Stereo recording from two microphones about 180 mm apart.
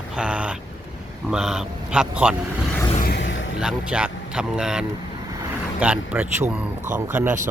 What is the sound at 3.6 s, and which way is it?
Speech, 5° right (ahead or behind).